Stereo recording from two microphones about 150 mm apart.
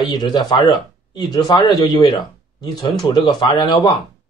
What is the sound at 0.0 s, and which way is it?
Speech, 30° left (ahead or behind).